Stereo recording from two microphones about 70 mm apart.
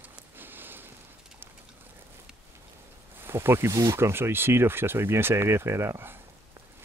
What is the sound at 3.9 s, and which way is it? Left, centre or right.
Speech, right.